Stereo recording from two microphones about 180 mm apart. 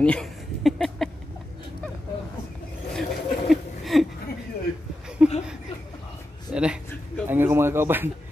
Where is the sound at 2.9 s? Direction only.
Centre (ahead or behind).